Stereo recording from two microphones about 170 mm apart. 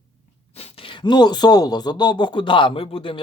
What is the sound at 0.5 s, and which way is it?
Speech, 35° left (ahead or behind).